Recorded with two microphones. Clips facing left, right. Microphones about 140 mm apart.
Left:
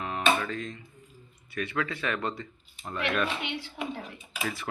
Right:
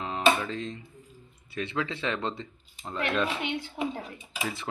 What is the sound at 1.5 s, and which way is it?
Speech, 25° right (ahead or behind).